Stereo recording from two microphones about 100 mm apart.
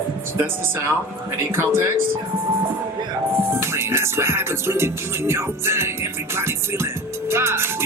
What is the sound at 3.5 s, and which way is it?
Music, 25° right (ahead or behind).